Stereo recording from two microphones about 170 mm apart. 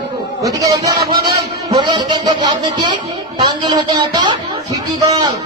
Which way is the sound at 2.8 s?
30° right (ahead or behind).